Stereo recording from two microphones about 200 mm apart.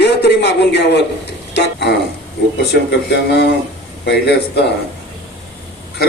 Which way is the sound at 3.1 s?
55° left (ahead or behind).